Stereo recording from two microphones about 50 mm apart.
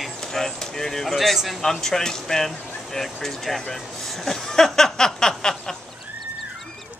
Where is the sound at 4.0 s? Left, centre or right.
Centre.